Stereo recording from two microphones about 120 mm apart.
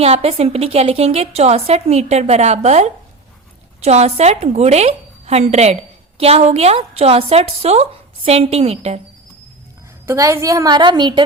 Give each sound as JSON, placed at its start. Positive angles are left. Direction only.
{"t": 0.0, "sound": "a woman's voice", "side_deg": -60}
{"t": 10.1, "sound": "a woman's voice", "side_deg": -25}